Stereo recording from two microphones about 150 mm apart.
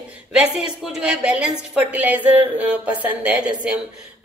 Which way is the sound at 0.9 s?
5° right (ahead or behind).